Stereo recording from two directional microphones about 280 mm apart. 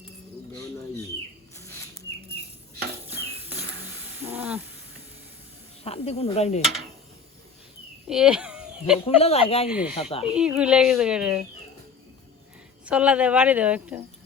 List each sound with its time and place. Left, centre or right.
1.5 s bird flight: centre
4.2 s hiss: centre
5.8 s speech: left
8.0 s a sound: centre
9.0 s speech: left
9.6 s a woman's voice: centre
9.9 s speech: left
10.3 s a woman's voice: centre
12.8 s a woman's voice: centre